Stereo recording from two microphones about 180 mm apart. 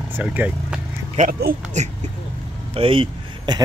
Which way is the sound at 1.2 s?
45° right (ahead or behind).